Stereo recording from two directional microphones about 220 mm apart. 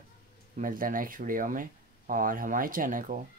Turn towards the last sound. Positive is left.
turn(degrees=-40)  # may be behind; listen again after turning